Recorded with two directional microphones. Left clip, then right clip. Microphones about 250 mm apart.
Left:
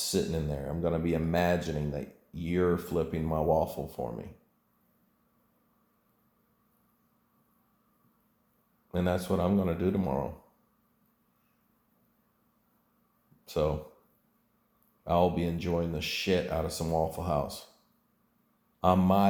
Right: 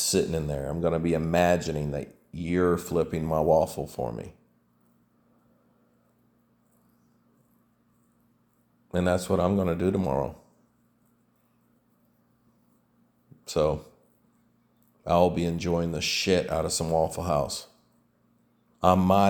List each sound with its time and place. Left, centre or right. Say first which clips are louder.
0.0 s speech: right 5 dB; right
8.9 s speech: right 5 dB; right
13.4 s speech: right 5 dB; right
15.0 s speech: right 4 dB; right
18.8 s speech: right 4 dB; right